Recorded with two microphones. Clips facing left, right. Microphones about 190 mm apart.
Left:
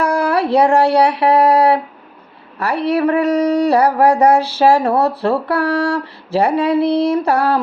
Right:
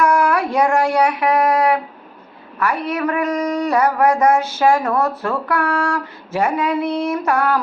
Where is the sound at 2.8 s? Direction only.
35° left (ahead or behind).